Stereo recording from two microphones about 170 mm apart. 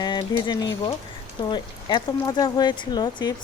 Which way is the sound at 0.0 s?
25° left (ahead or behind).